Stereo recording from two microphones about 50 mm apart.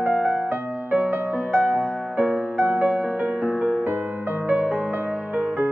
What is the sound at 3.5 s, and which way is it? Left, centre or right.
Music, centre.